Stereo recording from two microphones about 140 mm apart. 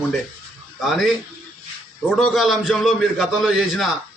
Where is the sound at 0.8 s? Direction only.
Centre (ahead or behind).